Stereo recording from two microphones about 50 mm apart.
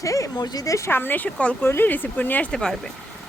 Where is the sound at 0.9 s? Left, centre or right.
Left.